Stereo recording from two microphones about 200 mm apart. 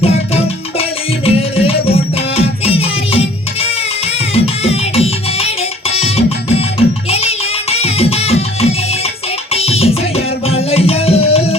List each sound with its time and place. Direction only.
0.0 s music: 30° left (ahead or behind)